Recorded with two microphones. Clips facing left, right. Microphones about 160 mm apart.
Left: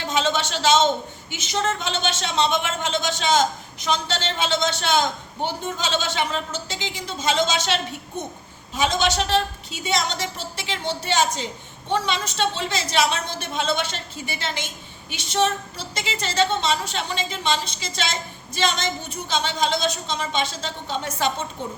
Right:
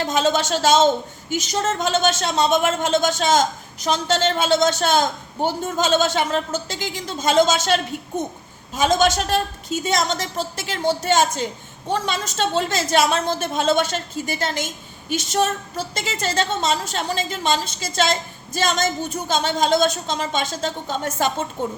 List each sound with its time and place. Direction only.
0.0 s a woman's voice: 45° right (ahead or behind)